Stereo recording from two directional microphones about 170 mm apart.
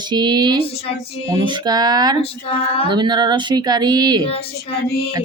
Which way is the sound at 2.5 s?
35° left (ahead or behind).